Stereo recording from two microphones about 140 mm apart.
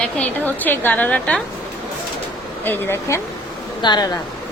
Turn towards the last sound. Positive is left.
turn(degrees=30)  # may be behind; listen again after turning